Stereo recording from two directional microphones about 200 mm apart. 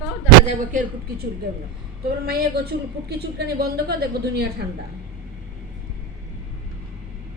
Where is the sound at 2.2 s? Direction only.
50° right (ahead or behind).